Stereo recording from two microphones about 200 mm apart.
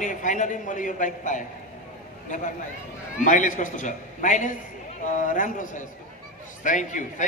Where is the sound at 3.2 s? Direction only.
40° left (ahead or behind).